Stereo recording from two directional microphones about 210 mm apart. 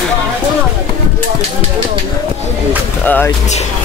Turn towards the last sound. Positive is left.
turn(degrees=10)  # may be behind; listen again after turning